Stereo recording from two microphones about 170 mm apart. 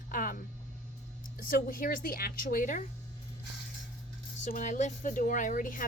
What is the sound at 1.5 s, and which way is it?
Speech, 55° left (ahead or behind).